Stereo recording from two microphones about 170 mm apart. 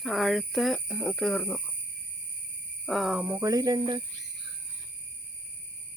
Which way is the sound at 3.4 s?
20° right (ahead or behind).